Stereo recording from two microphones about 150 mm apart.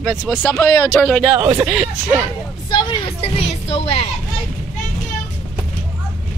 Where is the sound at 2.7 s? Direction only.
35° left (ahead or behind).